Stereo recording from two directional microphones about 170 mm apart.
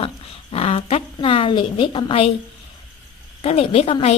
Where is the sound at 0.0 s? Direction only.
35° left (ahead or behind).